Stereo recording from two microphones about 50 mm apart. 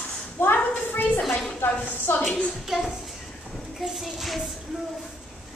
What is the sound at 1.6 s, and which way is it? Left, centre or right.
Speech, left.